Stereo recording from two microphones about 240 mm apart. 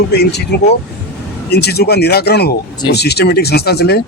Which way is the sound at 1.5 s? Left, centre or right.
Left.